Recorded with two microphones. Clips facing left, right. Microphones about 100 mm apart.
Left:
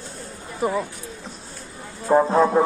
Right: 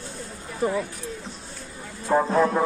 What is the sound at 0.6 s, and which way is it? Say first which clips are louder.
Speech: left 1 dB; 10° left (ahead or behind).